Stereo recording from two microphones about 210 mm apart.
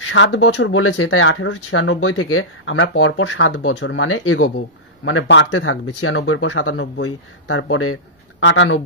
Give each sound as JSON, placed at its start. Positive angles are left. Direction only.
{"t": 0.0, "sound": "speech", "side_deg": 75}
{"t": 7.7, "sound": "speech", "side_deg": 90}